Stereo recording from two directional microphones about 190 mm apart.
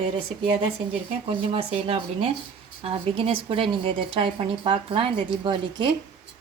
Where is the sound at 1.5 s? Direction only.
30° right (ahead or behind).